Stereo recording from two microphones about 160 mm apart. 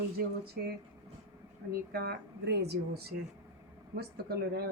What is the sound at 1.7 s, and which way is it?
Speech, 75° right (ahead or behind).